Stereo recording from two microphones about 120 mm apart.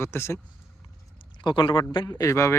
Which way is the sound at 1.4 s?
40° left (ahead or behind).